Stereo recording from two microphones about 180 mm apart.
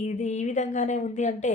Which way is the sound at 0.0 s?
40° left (ahead or behind).